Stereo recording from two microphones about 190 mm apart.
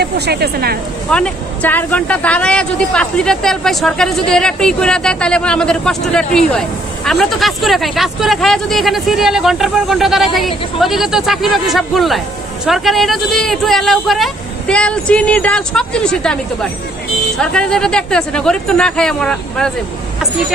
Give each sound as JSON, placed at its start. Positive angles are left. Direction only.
{"t": 0.0, "sound": "speech", "side_deg": -55}
{"t": 1.1, "sound": "speech", "side_deg": 5}
{"t": 17.4, "sound": "speech", "side_deg": 5}